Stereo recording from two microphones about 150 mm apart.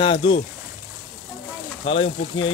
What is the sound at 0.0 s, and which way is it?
Speech, 40° left (ahead or behind).